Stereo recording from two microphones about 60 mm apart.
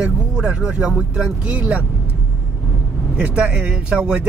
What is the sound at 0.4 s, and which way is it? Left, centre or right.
Speech, centre.